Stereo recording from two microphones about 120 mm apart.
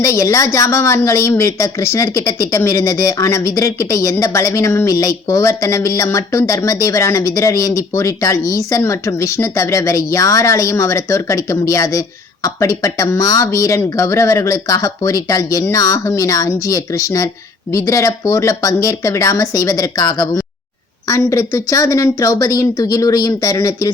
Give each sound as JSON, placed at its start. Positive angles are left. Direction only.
{"t": 0.0, "sound": "a woman's voice", "side_deg": 25}